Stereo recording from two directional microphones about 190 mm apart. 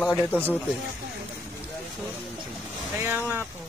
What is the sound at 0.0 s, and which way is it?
Speech, 10° left (ahead or behind).